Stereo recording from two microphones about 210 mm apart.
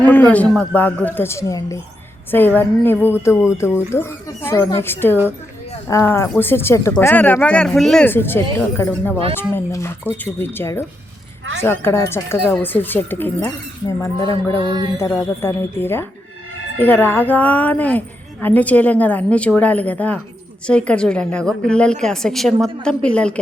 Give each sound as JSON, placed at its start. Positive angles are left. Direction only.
{"t": 0.1, "sound": "speech", "side_deg": 10}
{"t": 14.6, "sound": "music", "side_deg": -25}
{"t": 14.9, "sound": "a woman's voice", "side_deg": 10}